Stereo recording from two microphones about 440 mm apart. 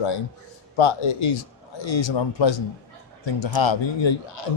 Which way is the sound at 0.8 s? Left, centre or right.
Left.